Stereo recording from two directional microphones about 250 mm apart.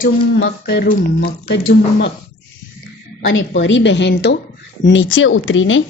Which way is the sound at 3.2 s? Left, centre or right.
Left.